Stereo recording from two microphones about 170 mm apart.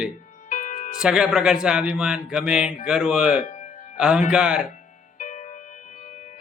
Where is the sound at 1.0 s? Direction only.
5° right (ahead or behind).